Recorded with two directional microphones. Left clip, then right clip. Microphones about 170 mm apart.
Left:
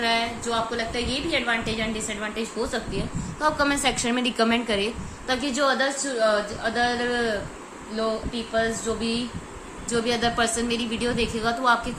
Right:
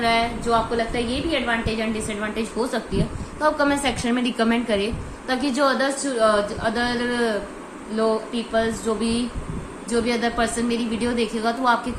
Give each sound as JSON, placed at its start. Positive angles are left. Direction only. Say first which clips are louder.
{"t": 0.0, "sound": "a woman's voice", "louder": "right 3 dB", "side_deg": 10}
{"t": 3.4, "sound": "a woman's voice", "louder": "right 2 dB", "side_deg": 20}
{"t": 5.3, "sound": "a woman's voice", "louder": "right 2 dB", "side_deg": 10}
{"t": 9.9, "sound": "a woman's voice", "louder": "right 1 dB", "side_deg": 15}